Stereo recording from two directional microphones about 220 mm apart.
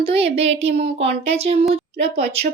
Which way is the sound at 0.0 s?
25° right (ahead or behind).